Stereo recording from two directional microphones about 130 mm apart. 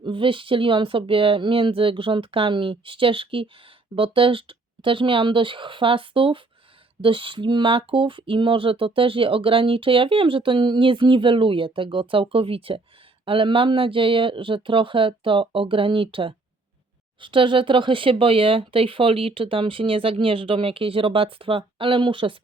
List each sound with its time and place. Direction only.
0.0 s speech: 40° right (ahead or behind)